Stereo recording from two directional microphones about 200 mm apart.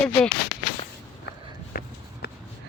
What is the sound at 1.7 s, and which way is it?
Walk, 45° left (ahead or behind).